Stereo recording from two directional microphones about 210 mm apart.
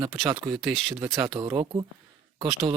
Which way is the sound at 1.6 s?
20° right (ahead or behind).